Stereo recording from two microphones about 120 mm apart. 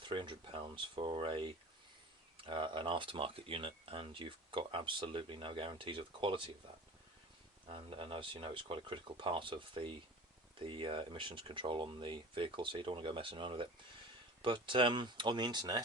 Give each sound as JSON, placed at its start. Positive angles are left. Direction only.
{"t": 0.0, "sound": "speech", "side_deg": -45}
{"t": 7.7, "sound": "speech", "side_deg": -45}